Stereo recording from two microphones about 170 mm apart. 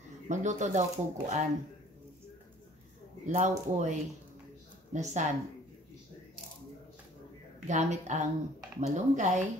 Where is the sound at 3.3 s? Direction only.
45° right (ahead or behind).